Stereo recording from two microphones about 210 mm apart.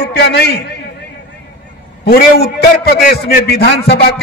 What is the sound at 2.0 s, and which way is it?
A man's voice, 45° left (ahead or behind).